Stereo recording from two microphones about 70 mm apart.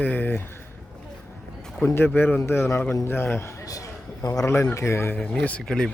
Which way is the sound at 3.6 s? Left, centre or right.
Left.